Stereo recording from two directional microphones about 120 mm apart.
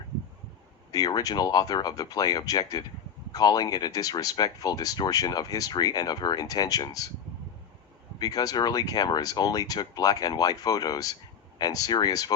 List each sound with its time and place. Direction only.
0.9 s speech: 30° left (ahead or behind)
8.2 s speech: 30° left (ahead or behind)